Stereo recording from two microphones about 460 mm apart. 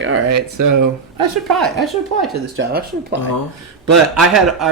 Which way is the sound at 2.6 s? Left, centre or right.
Right.